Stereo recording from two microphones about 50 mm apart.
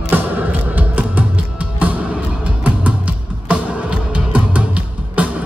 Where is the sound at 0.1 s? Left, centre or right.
Right.